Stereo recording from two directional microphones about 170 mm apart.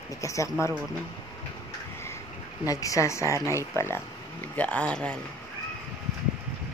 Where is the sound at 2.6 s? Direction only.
20° left (ahead or behind).